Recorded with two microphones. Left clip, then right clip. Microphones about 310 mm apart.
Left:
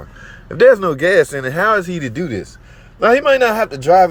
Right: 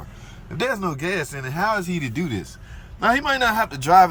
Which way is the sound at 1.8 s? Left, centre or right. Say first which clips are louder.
Left 5 dB; centre.